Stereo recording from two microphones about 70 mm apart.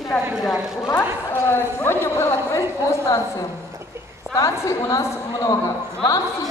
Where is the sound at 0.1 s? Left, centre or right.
Centre.